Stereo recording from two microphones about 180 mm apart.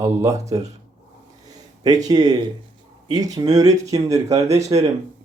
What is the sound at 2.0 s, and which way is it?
Speech, 20° right (ahead or behind).